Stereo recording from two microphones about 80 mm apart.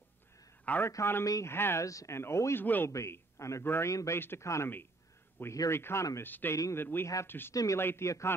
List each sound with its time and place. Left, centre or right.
0.8 s speech: left
1.2 s speech: left
1.5 s speech: left
2.6 s speech: left
2.9 s a man's voice: left
3.9 s speech: left
5.7 s speech: left
6.5 s speech: left
7.5 s speech: left
7.8 s speech: left